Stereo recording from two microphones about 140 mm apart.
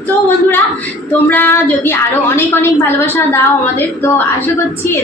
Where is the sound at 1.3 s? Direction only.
15° left (ahead or behind).